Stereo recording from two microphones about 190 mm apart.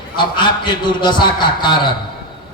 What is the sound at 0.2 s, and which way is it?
Speech, 25° left (ahead or behind).